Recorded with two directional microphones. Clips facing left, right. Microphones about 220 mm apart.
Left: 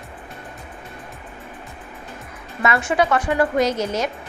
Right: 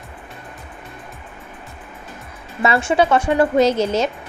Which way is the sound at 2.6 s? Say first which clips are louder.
Right 3 dB; 30° right (ahead or behind).